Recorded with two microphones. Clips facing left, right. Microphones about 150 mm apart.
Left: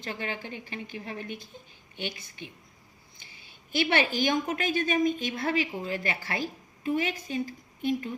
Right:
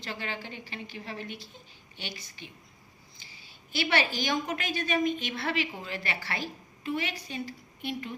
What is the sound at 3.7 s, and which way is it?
A woman's voice, 50° left (ahead or behind).